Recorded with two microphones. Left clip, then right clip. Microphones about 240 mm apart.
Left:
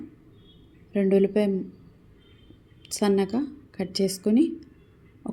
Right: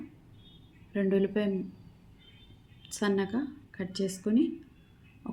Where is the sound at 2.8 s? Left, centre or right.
Centre.